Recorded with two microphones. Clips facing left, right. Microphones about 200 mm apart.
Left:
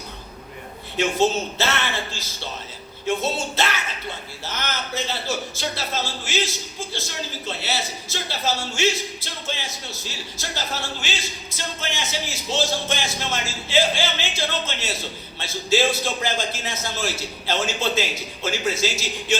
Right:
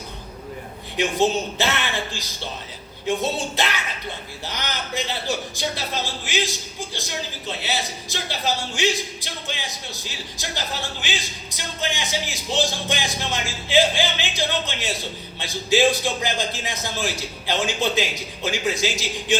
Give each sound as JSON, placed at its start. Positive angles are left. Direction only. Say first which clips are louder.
{"t": 0.9, "sound": "speech", "louder": "even", "side_deg": -15}